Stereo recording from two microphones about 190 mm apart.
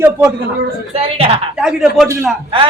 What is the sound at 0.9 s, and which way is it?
Speech, 30° right (ahead or behind).